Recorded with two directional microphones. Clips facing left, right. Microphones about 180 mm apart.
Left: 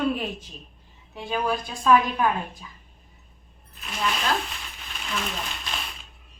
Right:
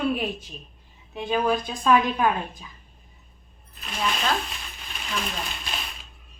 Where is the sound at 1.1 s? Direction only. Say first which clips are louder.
Right 3 dB; 20° right (ahead or behind).